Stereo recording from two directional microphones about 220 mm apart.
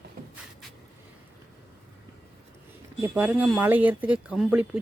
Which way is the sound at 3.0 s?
5° right (ahead or behind).